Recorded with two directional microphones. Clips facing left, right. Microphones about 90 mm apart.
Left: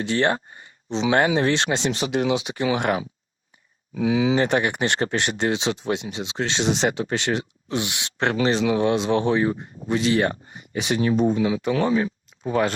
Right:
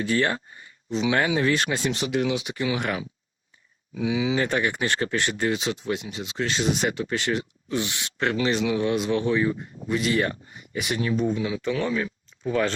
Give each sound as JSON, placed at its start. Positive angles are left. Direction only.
{"t": 0.2, "sound": "speech", "side_deg": 40}
{"t": 3.9, "sound": "speech", "side_deg": 35}
{"t": 4.4, "sound": "speech", "side_deg": 25}
{"t": 8.3, "sound": "speech", "side_deg": 35}